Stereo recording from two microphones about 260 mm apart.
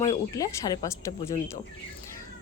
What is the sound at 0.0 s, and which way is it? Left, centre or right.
A woman's voice, centre.